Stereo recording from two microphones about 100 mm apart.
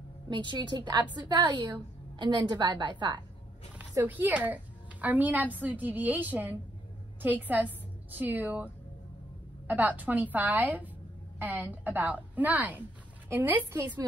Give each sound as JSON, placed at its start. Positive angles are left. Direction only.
{"t": 0.3, "sound": "a woman's voice", "side_deg": -50}
{"t": 4.0, "sound": "a woman's voice", "side_deg": -15}
{"t": 9.7, "sound": "a woman's voice", "side_deg": -15}